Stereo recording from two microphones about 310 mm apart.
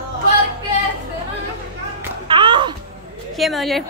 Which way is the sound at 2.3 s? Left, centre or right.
Centre.